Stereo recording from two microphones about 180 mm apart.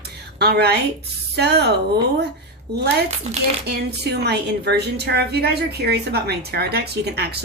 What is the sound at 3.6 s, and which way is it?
A woman's voice, 65° right (ahead or behind).